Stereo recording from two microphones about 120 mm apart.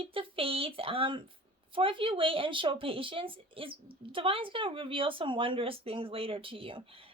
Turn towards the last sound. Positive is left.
turn(degrees=-50)  # may be behind; listen again after turning